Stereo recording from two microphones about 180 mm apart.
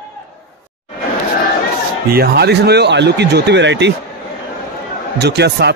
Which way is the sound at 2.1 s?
65° right (ahead or behind).